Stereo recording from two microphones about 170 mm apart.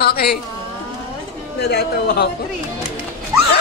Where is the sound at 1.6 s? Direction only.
70° left (ahead or behind).